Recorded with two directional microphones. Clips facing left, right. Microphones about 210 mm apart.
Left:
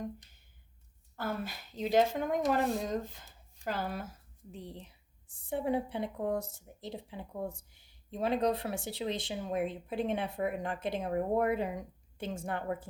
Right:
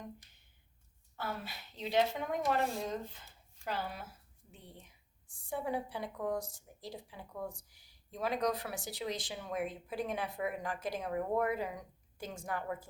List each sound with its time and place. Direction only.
1.1 s speech: 50° left (ahead or behind)
4.7 s speech: 35° left (ahead or behind)